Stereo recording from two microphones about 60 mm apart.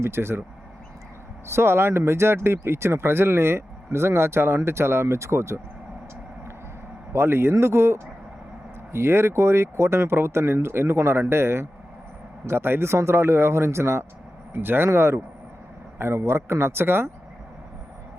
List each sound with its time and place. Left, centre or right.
0.0 s speech: right
1.5 s speech: right
7.1 s speech: right
14.5 s speech: right